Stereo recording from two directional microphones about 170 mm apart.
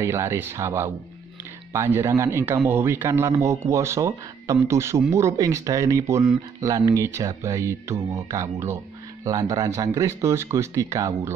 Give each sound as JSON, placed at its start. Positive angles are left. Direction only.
{"t": 0.0, "sound": "a man's voice", "side_deg": -15}
{"t": 2.0, "sound": "a man's voice", "side_deg": -15}